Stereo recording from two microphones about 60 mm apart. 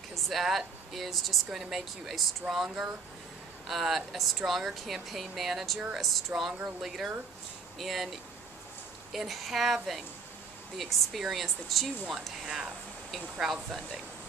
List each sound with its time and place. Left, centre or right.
0.1 s speech: centre
9.1 s speech: centre
12.4 s speech: centre